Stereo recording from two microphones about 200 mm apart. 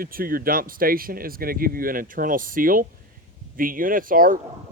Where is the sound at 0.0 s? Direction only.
45° right (ahead or behind).